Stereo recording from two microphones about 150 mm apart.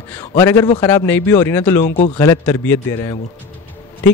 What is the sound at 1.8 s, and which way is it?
Speech, 45° left (ahead or behind).